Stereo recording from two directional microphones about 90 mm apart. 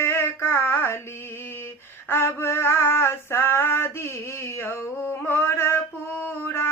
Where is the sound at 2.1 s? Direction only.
25° left (ahead or behind).